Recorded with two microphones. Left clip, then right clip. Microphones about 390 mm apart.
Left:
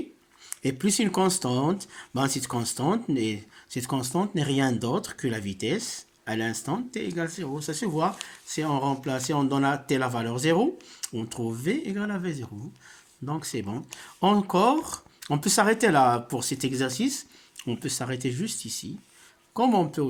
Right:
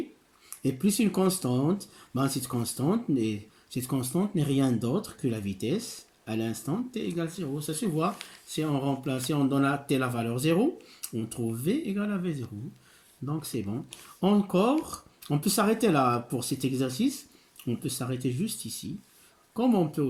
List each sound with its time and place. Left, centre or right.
0.5 s speech: centre